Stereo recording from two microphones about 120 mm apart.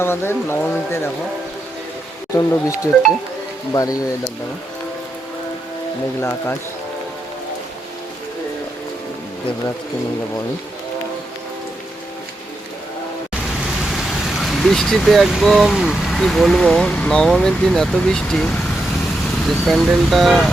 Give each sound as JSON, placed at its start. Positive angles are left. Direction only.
{"t": 0.0, "sound": "speech", "side_deg": 20}
{"t": 2.3, "sound": "speech", "side_deg": 25}
{"t": 6.1, "sound": "speech", "side_deg": 20}
{"t": 13.9, "sound": "speech", "side_deg": 0}
{"t": 19.6, "sound": "speech", "side_deg": 0}